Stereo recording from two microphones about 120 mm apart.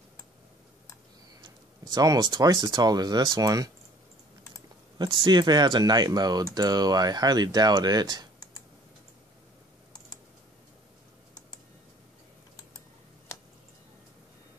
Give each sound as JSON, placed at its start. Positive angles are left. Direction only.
{"t": 1.4, "sound": "speech", "side_deg": -35}
{"t": 4.9, "sound": "speech", "side_deg": -35}